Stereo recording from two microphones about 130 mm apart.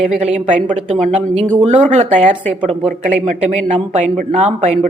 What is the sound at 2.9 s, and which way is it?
A woman's voice, 65° right (ahead or behind).